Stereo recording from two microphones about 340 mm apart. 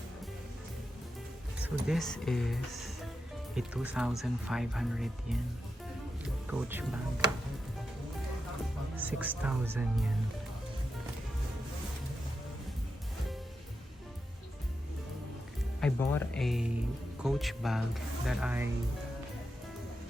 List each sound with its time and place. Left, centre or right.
1.6 s speech: centre
6.5 s speech: centre
9.0 s music: centre
9.3 s speech: centre
15.8 s speech: centre